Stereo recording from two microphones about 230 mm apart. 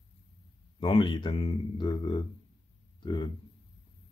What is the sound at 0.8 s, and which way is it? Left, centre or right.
Speech, left.